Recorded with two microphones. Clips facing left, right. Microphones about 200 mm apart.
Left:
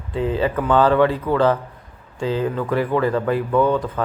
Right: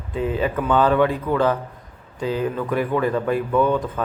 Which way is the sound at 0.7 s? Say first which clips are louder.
Left 2 dB; 15° right (ahead or behind).